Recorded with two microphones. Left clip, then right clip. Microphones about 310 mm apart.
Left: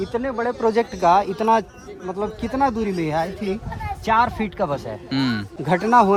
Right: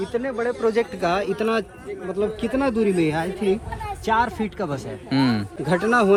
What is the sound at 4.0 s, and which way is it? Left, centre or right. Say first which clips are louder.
Speech: left 3 dB; left.